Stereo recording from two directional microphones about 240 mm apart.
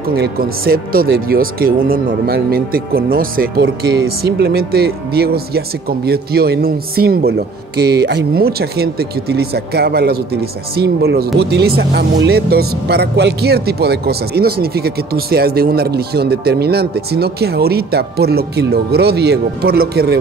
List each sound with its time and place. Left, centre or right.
0.1 s speech: right